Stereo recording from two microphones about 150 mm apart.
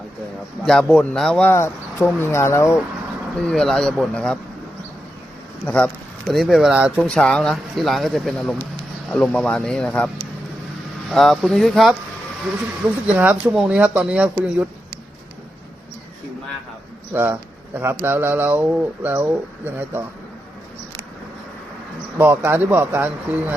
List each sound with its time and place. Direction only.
0.6 s speech: 5° left (ahead or behind)
1.5 s speech: 20° left (ahead or behind)
3.3 s speech: 5° left (ahead or behind)
5.6 s speech: 10° left (ahead or behind); by 7.0 s 5° right (ahead or behind)
7.0 s speech: 5° left (ahead or behind)
11.1 s speech: centre (ahead or behind)
13.1 s speech: 10° right (ahead or behind)
17.7 s speech: 15° right (ahead or behind)
22.2 s speech: 15° right (ahead or behind)